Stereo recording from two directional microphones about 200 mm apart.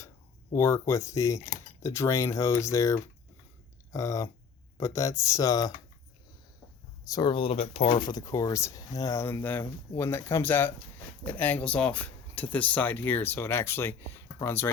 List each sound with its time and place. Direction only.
0.5 s speech: 15° left (ahead or behind)
7.0 s speech: 20° left (ahead or behind)